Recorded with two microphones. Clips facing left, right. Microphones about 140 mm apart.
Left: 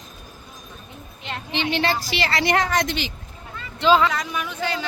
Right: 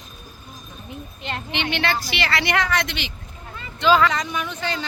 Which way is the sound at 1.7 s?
35° left (ahead or behind).